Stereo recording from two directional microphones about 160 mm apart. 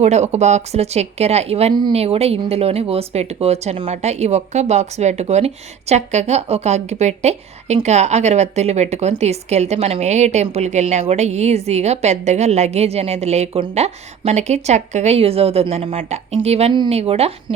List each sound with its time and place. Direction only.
0.0 s a woman's voice: 45° right (ahead or behind)